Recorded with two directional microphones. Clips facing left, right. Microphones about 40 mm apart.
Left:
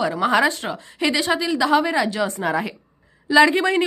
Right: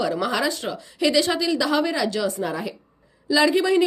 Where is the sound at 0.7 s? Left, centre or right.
Left.